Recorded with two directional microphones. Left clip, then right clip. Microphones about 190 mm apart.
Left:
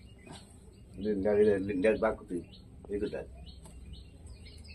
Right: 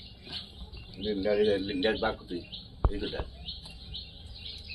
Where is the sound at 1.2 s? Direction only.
30° left (ahead or behind).